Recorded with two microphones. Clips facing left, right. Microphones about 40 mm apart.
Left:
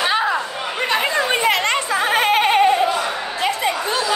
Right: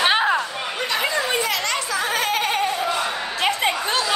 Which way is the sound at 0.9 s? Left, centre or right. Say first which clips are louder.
Left 3 dB; left.